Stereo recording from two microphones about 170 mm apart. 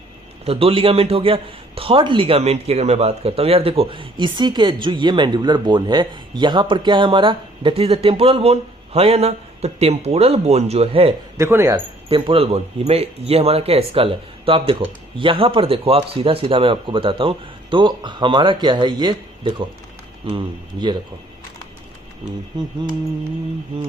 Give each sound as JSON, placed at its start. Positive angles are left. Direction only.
{"t": 0.4, "sound": "a man's voice", "side_deg": -35}
{"t": 11.3, "sound": "speech", "side_deg": -15}
{"t": 12.0, "sound": "a man's voice", "side_deg": -30}